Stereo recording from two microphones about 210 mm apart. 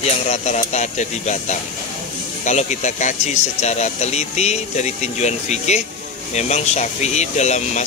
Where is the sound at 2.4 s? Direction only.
35° left (ahead or behind).